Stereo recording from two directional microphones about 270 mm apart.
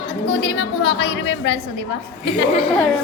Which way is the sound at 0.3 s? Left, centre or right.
Left.